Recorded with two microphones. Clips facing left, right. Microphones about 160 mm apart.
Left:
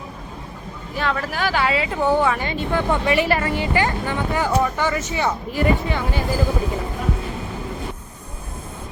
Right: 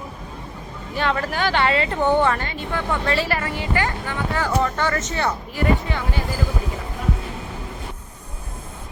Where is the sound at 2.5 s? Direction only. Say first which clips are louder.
Left 4 dB; 15° left (ahead or behind).